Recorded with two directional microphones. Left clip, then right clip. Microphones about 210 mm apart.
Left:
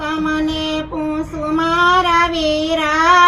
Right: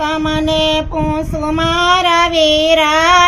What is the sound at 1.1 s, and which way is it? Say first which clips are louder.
Child singing: right 3 dB; 50° right (ahead or behind).